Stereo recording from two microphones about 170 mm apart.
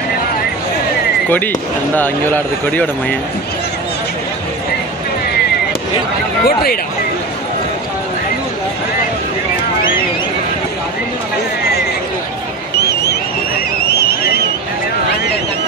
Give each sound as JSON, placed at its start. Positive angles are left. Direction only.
{"t": 2.0, "sound": "speech", "side_deg": 10}
{"t": 6.4, "sound": "speech", "side_deg": 65}
{"t": 12.7, "sound": "a sound", "side_deg": 75}